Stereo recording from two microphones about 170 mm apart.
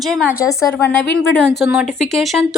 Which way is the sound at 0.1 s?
5° right (ahead or behind).